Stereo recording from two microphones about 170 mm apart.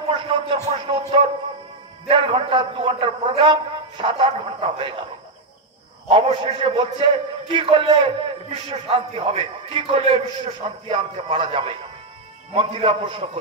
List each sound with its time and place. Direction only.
0.1 s a sound: 30° right (ahead or behind)
2.0 s a man's voice: 30° right (ahead or behind)
6.0 s a man's voice: 35° right (ahead or behind)